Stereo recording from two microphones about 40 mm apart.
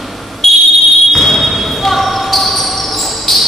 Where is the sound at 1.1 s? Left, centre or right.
Centre.